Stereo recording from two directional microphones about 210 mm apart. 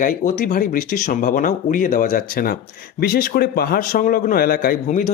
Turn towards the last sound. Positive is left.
turn(degrees=40)  # may be behind; listen again after turning